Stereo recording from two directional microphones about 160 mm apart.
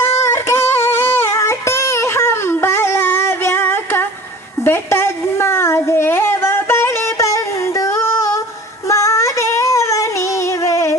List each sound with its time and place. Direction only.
0.0 s music: 15° left (ahead or behind)
4.6 s a sound: 15° left (ahead or behind)
8.9 s female singing: 20° left (ahead or behind)